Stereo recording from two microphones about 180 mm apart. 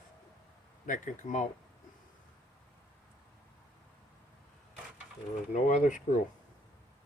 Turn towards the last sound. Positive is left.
turn(degrees=45)  # may be behind; listen again after turning